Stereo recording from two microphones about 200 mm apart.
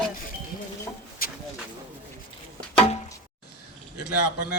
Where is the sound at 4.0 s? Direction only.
55° left (ahead or behind).